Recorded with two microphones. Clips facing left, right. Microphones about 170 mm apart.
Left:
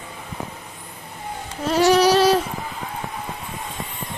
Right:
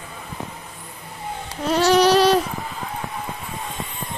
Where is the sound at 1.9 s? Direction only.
5° left (ahead or behind).